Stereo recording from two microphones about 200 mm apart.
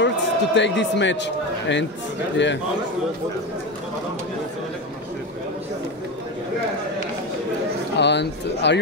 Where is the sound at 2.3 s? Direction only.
65° left (ahead or behind).